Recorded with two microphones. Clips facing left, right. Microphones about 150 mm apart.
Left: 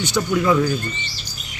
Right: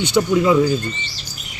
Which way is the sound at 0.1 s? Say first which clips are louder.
Right 3 dB; 20° right (ahead or behind).